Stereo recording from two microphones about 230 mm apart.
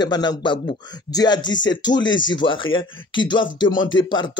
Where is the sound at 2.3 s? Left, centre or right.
Centre.